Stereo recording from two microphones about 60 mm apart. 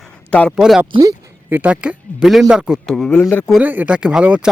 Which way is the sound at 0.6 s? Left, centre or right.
Centre.